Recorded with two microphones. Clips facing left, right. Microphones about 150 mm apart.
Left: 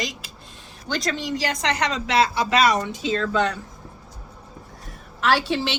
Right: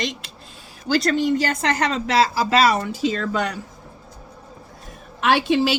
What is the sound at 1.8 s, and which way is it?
Speech, centre (ahead or behind).